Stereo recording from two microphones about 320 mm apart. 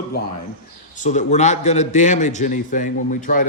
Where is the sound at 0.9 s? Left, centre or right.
Left.